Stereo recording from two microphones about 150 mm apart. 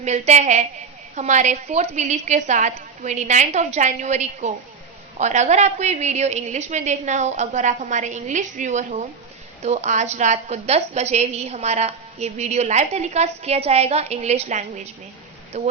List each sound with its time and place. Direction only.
0.0 s a woman's voice: 50° right (ahead or behind)